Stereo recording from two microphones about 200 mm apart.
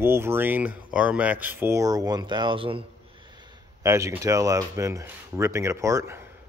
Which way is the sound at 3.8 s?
15° right (ahead or behind).